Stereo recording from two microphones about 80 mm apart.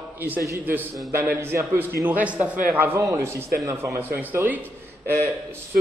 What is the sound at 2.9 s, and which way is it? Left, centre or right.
Speech, right.